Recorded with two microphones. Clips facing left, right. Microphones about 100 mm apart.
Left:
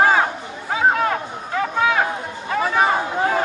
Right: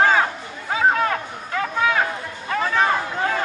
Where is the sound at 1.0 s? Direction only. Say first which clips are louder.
Left 2 dB; 20° left (ahead or behind).